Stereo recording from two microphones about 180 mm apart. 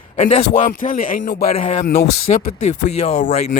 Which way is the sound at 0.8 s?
50° left (ahead or behind).